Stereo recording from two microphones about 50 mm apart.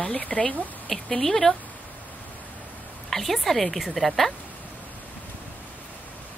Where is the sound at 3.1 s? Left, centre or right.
Centre.